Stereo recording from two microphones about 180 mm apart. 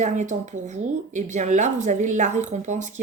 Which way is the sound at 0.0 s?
40° right (ahead or behind).